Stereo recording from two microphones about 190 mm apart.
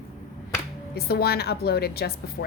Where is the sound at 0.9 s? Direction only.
55° left (ahead or behind).